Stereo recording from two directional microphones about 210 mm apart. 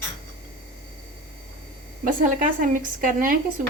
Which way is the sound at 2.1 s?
40° right (ahead or behind).